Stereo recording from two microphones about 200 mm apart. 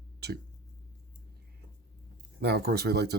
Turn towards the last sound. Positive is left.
turn(degrees=-55)  # may be behind; listen again after turning